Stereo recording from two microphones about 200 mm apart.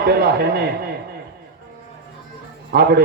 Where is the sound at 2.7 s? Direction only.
50° right (ahead or behind).